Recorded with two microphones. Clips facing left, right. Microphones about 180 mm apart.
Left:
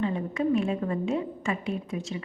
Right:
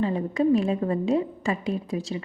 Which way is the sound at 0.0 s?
35° right (ahead or behind).